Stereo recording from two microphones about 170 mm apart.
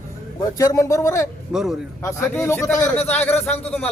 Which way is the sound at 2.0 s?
15° left (ahead or behind).